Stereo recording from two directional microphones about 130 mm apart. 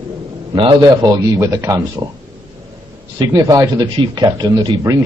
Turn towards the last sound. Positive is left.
turn(degrees=-20)  # may be behind; listen again after turning